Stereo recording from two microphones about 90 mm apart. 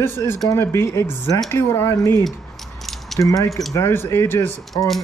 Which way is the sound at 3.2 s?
40° left (ahead or behind).